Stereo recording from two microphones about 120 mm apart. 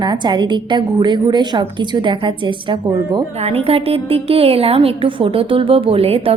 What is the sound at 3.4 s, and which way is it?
A woman's voice, 55° right (ahead or behind).